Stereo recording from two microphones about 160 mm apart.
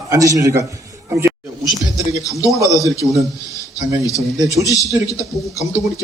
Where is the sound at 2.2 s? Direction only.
20° left (ahead or behind).